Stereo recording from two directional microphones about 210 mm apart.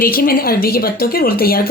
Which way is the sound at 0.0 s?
45° left (ahead or behind).